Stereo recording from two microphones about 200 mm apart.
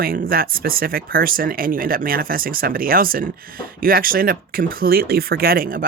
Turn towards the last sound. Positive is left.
turn(degrees=-45)  # may be behind; listen again after turning